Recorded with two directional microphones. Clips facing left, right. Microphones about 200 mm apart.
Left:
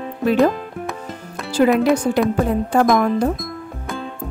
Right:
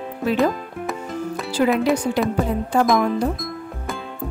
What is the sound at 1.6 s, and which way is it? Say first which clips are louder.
Speech: left 4 dB; 50° left (ahead or behind).